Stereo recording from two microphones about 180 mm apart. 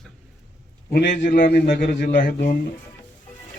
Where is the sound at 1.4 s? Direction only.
60° left (ahead or behind).